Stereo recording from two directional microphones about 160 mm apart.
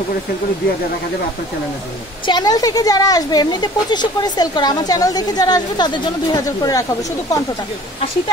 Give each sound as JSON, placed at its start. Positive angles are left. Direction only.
{"t": 2.2, "sound": "speech", "side_deg": 25}